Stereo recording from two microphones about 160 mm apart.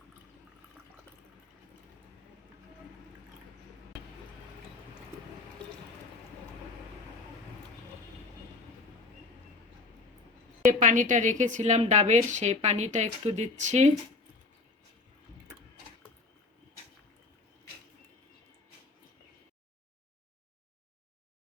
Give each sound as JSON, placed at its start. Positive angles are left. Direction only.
{"t": 10.7, "sound": "a woman's voice", "side_deg": -55}